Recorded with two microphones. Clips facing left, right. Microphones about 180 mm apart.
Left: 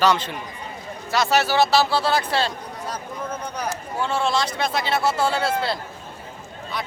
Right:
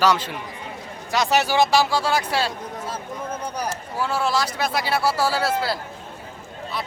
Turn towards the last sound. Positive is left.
turn(degrees=-5)  # may be behind; listen again after turning